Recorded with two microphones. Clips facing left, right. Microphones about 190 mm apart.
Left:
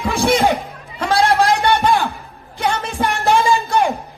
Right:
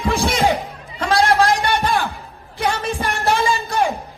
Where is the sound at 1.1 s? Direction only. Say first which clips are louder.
Left 1 dB; 60° left (ahead or behind).